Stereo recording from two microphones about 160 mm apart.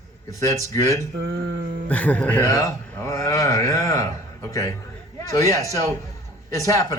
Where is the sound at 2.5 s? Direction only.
20° left (ahead or behind).